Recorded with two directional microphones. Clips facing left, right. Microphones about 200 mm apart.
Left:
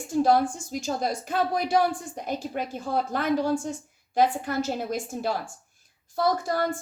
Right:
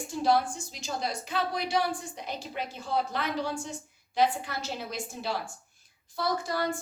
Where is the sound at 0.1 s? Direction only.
45° left (ahead or behind).